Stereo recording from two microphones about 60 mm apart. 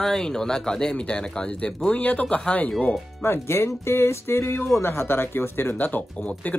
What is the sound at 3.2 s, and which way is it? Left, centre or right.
Speech, left.